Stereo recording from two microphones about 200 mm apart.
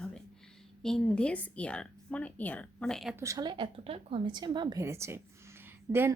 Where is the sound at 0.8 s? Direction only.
5° left (ahead or behind).